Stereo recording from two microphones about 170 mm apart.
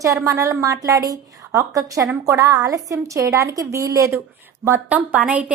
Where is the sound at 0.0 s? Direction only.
20° right (ahead or behind).